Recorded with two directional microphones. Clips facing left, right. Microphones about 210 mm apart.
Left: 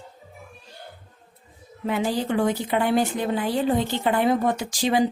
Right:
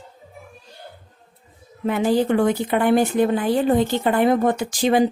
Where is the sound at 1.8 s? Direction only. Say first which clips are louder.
Right 6 dB; 55° right (ahead or behind).